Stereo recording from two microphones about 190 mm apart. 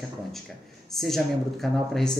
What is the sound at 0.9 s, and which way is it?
Speech, centre (ahead or behind).